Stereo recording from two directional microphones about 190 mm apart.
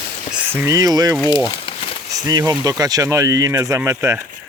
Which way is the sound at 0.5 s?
15° right (ahead or behind).